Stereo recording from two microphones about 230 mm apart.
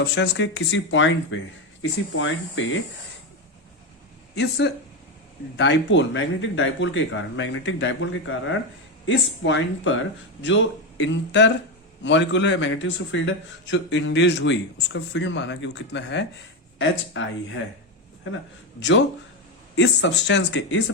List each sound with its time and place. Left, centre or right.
0.0 s a man's voice: left
4.4 s a man's voice: left
18.8 s a man's voice: left